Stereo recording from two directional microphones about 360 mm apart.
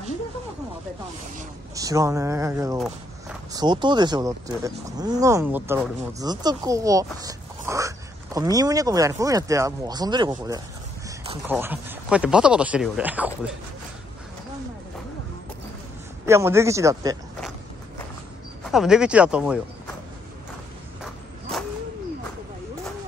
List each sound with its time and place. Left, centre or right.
1.8 s speech: centre
16.3 s speech: centre
18.7 s speech: centre
21.0 s a sound: centre